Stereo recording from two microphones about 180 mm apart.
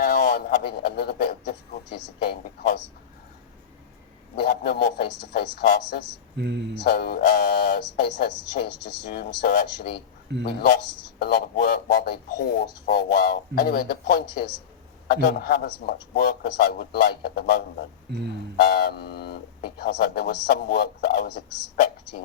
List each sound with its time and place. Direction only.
0.0 s a sound: 65° left (ahead or behind)
0.5 s a man's voice: 60° left (ahead or behind)
4.4 s a man's voice: 65° left (ahead or behind)
6.3 s speech: 65° right (ahead or behind)
6.8 s a man's voice: 65° left (ahead or behind)
10.4 s a man's voice: 65° left (ahead or behind)